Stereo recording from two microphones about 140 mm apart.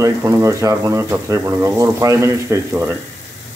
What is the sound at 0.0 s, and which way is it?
Speech, 25° right (ahead or behind).